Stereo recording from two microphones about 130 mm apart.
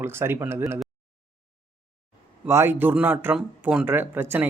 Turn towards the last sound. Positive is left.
turn(degrees=-15)  # may be behind; listen again after turning